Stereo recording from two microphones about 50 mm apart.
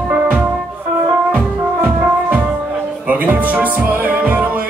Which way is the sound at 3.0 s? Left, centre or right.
Right.